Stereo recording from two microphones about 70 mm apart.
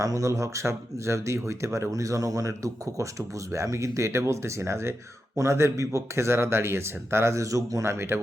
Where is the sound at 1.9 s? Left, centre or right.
Right.